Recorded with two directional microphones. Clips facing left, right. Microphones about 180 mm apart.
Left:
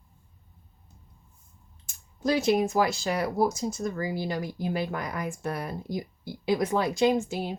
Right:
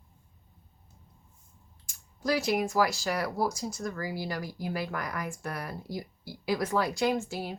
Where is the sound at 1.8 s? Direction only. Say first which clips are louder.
Left 3 dB; 25° left (ahead or behind).